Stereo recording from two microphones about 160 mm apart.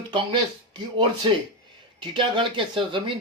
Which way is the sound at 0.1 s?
30° right (ahead or behind).